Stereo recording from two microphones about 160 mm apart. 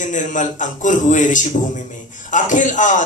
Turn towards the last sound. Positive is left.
turn(degrees=50)  # may be behind; listen again after turning